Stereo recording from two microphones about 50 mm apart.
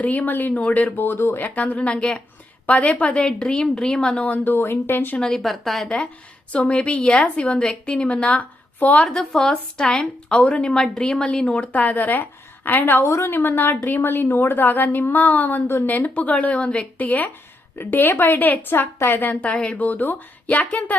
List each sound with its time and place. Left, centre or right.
0.0 s a woman's voice: left
1.5 s a woman's voice: left; by 4.2 s centre
4.4 s a woman's voice: left
5.4 s a woman's voice: centre
6.5 s a woman's voice: left
9.0 s a woman's voice: centre
11.4 s a woman's voice: left
13.1 s a woman's voice: left
15.9 s a woman's voice: left
19.3 s a woman's voice: left